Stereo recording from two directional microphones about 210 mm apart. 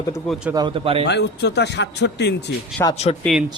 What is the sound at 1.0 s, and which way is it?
A man's voice, 55° left (ahead or behind).